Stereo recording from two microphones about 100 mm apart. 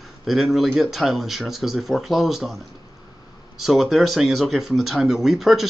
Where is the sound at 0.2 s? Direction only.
Centre (ahead or behind).